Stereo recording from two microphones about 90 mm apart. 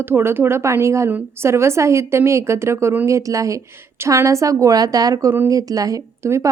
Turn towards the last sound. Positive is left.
turn(degrees=-35)  # may be behind; listen again after turning